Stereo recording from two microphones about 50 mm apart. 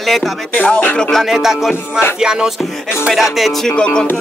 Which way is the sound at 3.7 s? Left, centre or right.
Centre.